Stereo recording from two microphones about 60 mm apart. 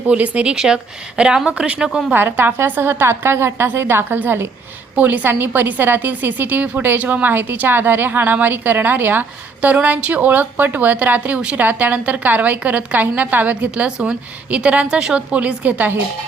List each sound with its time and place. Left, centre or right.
0.1 s a woman's voice: centre
2.1 s a woman's voice: right